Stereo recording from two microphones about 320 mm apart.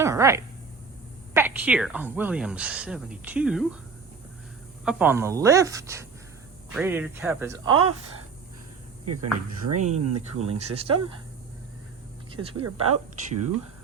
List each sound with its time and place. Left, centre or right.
0.0 s a sound: centre
1.3 s a woman's voice: centre
4.9 s speech: centre
9.0 s speech: right
10.7 s speech: centre
12.3 s speech: centre
12.6 s speech: right